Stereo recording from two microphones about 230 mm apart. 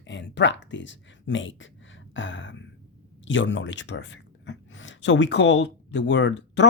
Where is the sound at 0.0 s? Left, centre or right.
Left.